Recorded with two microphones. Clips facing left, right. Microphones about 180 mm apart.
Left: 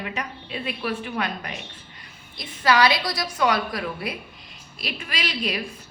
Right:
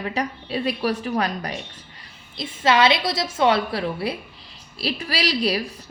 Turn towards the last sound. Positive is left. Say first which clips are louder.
# right 6 dB
turn(degrees=-35)  # may be behind; listen again after turning